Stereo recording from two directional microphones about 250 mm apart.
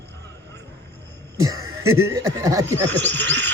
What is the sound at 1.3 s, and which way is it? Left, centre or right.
Chuckle, centre.